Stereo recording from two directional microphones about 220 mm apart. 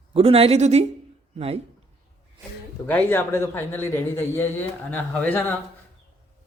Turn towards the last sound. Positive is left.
turn(degrees=10)  # may be behind; listen again after turning